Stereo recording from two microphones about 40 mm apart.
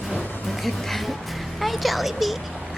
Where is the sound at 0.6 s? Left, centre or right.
Centre.